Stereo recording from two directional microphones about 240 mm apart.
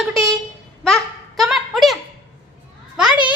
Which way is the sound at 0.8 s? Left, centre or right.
Centre.